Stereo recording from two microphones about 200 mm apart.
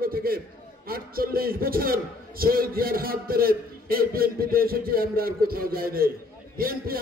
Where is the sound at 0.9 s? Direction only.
50° right (ahead or behind).